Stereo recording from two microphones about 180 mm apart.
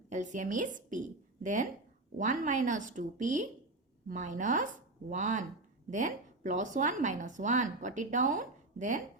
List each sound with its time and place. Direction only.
0.1 s speech: 45° right (ahead or behind)